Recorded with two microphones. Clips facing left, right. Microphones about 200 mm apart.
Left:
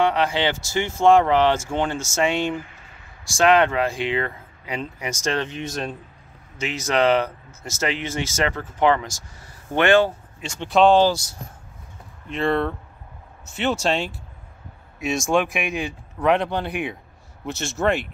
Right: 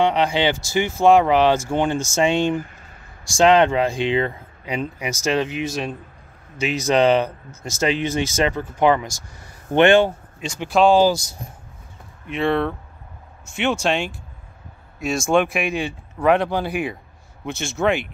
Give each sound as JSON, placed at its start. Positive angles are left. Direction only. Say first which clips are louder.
{"t": 0.0, "sound": "speech", "louder": "right 2 dB", "side_deg": -15}
{"t": 6.6, "sound": "speech", "louder": "right 3 dB", "side_deg": -15}
{"t": 10.7, "sound": "a man's voice", "louder": "right 1 dB", "side_deg": -5}
{"t": 12.3, "sound": "a man's voice", "louder": "right 1 dB", "side_deg": 0}